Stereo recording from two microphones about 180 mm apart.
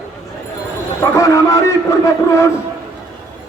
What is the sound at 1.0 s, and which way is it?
A man's voice, 15° left (ahead or behind).